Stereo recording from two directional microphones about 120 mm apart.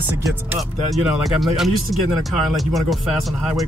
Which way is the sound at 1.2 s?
Centre (ahead or behind).